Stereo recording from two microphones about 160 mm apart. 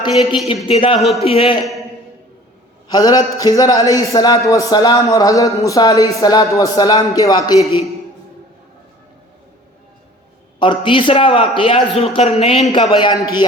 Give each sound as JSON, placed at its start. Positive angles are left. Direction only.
{"t": 0.4, "sound": "a man's voice", "side_deg": 35}
{"t": 0.9, "sound": "a man's voice", "side_deg": 0}
{"t": 1.2, "sound": "a man's voice", "side_deg": 35}
{"t": 1.6, "sound": "a sound", "side_deg": 0}
{"t": 2.9, "sound": "speech", "side_deg": 25}
{"t": 10.6, "sound": "a man's voice", "side_deg": 30}